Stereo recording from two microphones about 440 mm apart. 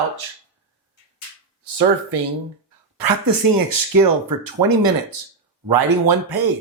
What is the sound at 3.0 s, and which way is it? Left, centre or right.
Speech, right.